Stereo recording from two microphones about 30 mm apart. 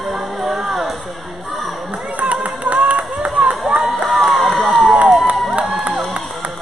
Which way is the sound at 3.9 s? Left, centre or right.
Centre.